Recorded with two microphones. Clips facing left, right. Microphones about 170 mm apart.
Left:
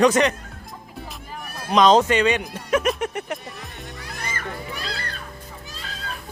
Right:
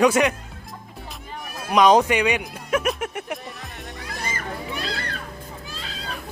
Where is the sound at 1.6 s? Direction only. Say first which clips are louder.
Even; 10° right (ahead or behind).